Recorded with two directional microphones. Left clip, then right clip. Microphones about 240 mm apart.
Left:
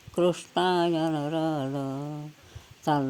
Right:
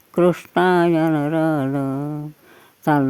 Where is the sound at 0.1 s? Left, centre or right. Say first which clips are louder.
Right 8 dB; right.